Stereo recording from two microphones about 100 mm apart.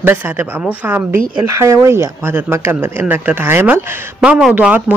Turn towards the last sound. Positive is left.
turn(degrees=-15)  # may be behind; listen again after turning